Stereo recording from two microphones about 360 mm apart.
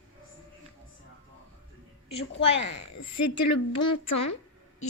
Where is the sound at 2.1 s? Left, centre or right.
Centre.